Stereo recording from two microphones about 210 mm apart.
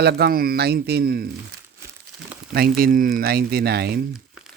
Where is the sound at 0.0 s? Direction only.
50° right (ahead or behind).